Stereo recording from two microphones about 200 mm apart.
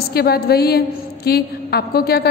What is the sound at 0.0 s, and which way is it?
A woman's voice, 50° left (ahead or behind).